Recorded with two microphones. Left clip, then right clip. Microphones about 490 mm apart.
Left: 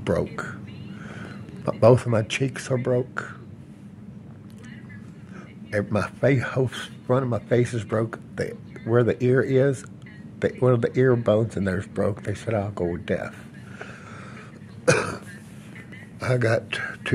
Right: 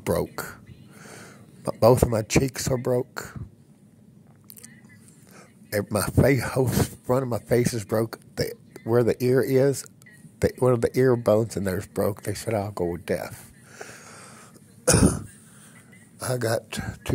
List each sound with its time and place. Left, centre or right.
0.0 s speech: right
5.7 s speech: right
14.9 s throat clearing: right
16.2 s speech: right